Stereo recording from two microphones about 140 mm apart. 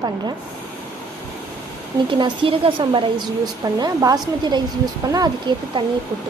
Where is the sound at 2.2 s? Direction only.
40° right (ahead or behind).